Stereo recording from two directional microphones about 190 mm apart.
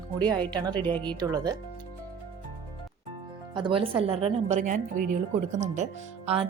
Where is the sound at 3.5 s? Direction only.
25° right (ahead or behind).